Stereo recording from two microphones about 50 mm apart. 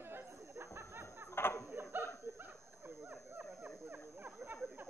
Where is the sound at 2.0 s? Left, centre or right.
Right.